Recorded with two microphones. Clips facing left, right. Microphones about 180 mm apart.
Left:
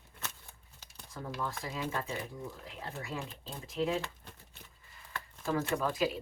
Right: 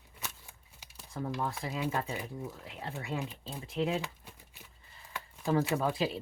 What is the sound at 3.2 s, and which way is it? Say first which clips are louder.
Speech: right 3 dB; 10° right (ahead or behind).